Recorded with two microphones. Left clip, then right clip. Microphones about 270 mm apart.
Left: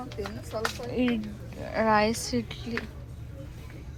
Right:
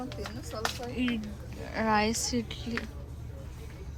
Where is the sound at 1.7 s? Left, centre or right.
Centre.